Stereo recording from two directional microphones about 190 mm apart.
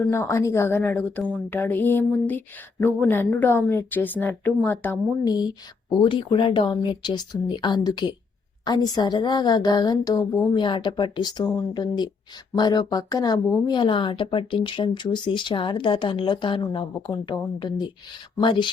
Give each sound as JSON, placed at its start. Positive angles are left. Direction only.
{"t": 0.1, "sound": "a woman's voice", "side_deg": 15}